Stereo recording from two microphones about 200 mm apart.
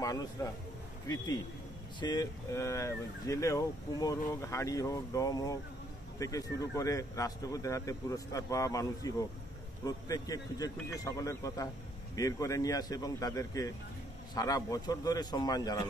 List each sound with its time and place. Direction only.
0.0 s a man's voice: 20° left (ahead or behind)